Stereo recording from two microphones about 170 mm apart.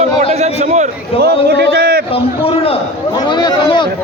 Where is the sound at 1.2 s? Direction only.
65° right (ahead or behind).